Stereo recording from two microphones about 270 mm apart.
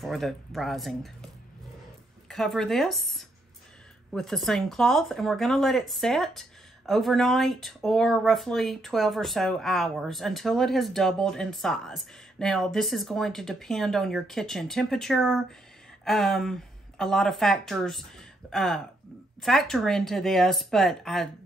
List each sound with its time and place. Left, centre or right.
0.0 s speech: centre